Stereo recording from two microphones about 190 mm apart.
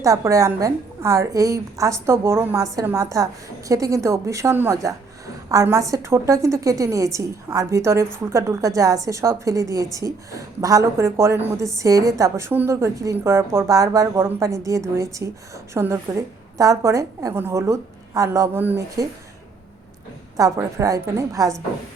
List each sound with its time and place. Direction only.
0.0 s a woman's voice: 15° right (ahead or behind)
20.3 s a woman's voice: 15° right (ahead or behind)